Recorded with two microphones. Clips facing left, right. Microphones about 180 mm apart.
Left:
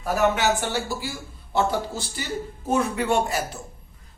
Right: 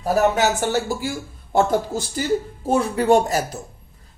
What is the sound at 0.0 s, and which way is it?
Speech, 40° right (ahead or behind).